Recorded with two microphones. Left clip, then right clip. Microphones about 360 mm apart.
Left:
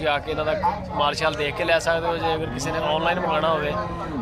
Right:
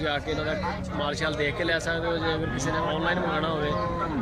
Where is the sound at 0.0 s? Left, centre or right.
Centre.